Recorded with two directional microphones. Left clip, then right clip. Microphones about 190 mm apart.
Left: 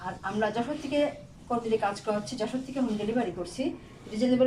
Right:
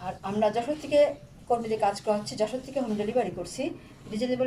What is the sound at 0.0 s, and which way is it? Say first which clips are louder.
A woman's voice: right 3 dB; 20° right (ahead or behind).